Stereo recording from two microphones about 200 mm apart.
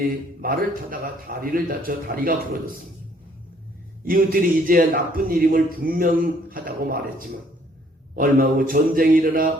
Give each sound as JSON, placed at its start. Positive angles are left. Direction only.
{"t": 0.4, "sound": "a man's voice", "side_deg": -45}
{"t": 4.0, "sound": "a man's voice", "side_deg": -45}